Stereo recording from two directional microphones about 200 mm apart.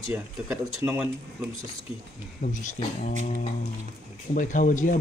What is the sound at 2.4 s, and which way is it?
Speech, 40° left (ahead or behind).